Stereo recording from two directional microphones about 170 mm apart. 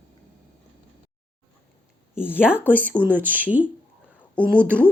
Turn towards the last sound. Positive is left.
turn(degrees=-10)  # may be behind; listen again after turning